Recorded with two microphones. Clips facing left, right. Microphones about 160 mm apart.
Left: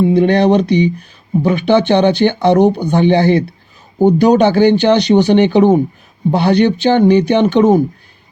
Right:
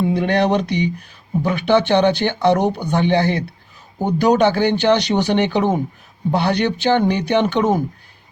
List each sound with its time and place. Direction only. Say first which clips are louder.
0.2 s speech: left 7 dB; 25° left (ahead or behind)